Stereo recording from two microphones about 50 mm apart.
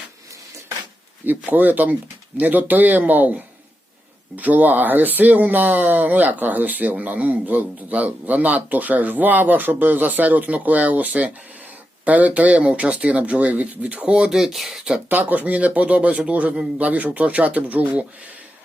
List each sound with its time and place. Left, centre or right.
1.5 s a man's voice: right; by 15.0 s centre
15.1 s speech: right